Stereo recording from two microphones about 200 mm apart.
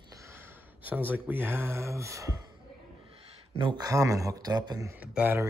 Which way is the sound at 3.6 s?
20° right (ahead or behind).